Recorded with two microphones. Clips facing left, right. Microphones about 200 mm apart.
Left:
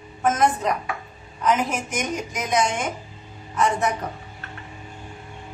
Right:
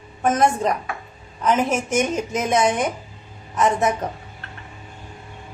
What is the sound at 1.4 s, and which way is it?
A woman's voice, 25° right (ahead or behind).